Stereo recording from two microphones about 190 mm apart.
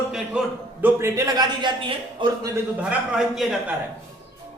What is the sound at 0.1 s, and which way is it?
A man's voice, 5° right (ahead or behind).